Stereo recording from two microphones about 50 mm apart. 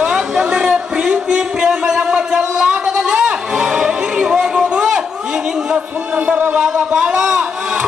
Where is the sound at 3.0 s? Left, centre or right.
Centre.